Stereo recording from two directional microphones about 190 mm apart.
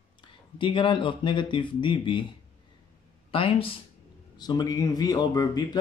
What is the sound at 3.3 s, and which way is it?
Speech, 30° left (ahead or behind).